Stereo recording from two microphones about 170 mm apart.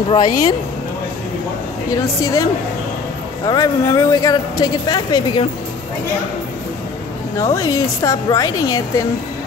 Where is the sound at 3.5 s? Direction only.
20° left (ahead or behind).